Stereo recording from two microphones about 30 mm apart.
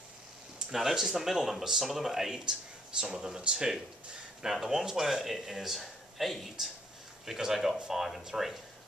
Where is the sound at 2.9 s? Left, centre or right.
Right.